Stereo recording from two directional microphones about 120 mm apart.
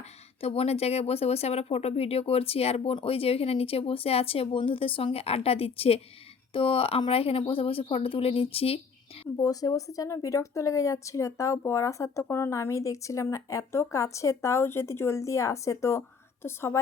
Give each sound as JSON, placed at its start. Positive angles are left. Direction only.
{"t": 0.4, "sound": "speech", "side_deg": 55}
{"t": 9.4, "sound": "speech", "side_deg": 30}